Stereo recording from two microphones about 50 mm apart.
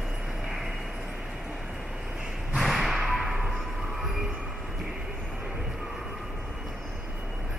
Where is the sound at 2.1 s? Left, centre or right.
Centre.